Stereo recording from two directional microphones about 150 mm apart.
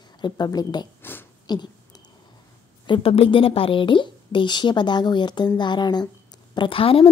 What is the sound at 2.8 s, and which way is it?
A woman's voice, 35° left (ahead or behind).